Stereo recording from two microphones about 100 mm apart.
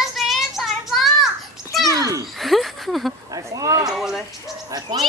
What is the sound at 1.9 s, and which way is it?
Speech, 35° right (ahead or behind).